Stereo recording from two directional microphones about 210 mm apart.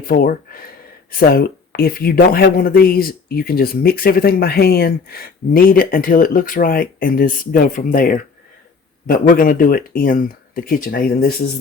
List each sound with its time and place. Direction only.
0.1 s speech: 45° left (ahead or behind)